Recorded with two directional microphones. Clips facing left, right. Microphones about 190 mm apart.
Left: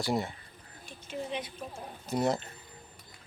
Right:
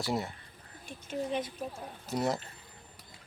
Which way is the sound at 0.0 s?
Centre (ahead or behind).